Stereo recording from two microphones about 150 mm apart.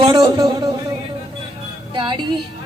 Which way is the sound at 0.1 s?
30° right (ahead or behind).